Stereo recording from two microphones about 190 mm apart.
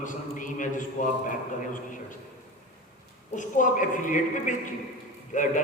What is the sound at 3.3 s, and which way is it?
A man's voice, 40° left (ahead or behind).